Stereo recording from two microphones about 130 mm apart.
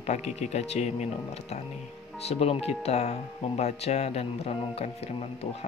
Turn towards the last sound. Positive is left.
turn(degrees=50)  # may be behind; listen again after turning